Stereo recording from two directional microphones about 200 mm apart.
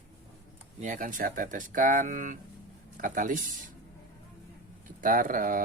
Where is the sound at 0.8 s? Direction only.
40° right (ahead or behind).